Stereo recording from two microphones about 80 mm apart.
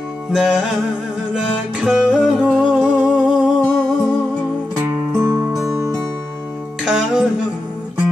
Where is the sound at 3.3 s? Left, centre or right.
Centre.